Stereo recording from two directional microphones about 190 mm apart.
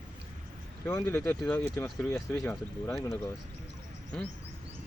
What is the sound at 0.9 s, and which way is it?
Speech, 15° left (ahead or behind).